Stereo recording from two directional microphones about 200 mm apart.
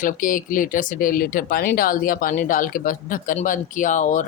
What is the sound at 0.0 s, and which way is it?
Speech, 40° left (ahead or behind).